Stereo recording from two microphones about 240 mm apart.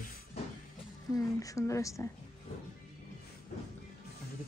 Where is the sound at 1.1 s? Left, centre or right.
Centre.